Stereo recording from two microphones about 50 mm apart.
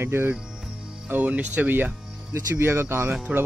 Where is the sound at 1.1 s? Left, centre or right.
Right.